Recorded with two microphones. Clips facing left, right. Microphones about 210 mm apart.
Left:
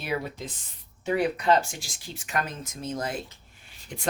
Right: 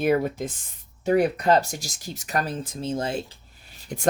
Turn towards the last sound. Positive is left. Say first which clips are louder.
# right 6 dB
turn(degrees=-45)  # may be behind; listen again after turning